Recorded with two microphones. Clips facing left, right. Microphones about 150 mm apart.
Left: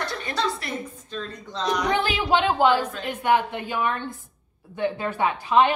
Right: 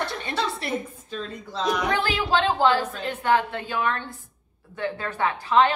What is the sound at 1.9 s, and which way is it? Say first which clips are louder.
A woman's voice: left 2 dB; 20° left (ahead or behind).